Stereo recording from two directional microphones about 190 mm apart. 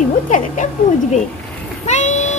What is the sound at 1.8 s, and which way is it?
Vehicle, 40° left (ahead or behind).